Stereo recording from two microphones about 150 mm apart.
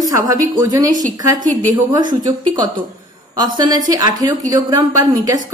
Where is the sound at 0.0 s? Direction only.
25° right (ahead or behind).